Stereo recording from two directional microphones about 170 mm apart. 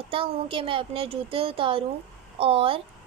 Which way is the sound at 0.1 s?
30° right (ahead or behind).